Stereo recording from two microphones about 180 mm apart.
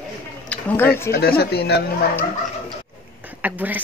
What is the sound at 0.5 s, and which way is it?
Speech, 10° left (ahead or behind).